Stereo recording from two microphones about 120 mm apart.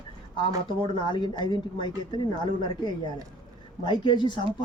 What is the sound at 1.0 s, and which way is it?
Speech, 40° left (ahead or behind).